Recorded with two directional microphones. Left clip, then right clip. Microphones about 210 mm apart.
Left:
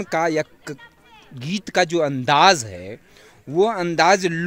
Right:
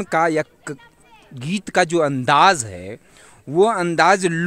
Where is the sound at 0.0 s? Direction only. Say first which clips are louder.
Right 2 dB; 15° right (ahead or behind).